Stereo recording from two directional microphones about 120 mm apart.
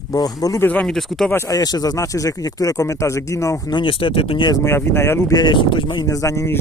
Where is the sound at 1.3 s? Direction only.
25° left (ahead or behind); by 4.5 s 50° left (ahead or behind).